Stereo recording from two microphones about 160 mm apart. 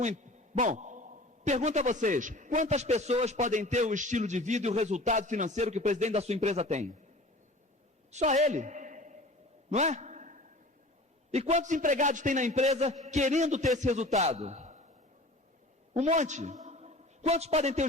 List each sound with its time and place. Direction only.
0.0 s a man's voice: 50° right (ahead or behind)
8.1 s a man's voice: 45° right (ahead or behind)
9.6 s a sound: 45° right (ahead or behind)
11.3 s a man's voice: 45° right (ahead or behind)
16.0 s a man's voice: 45° right (ahead or behind)
16.6 s a sound: 45° right (ahead or behind)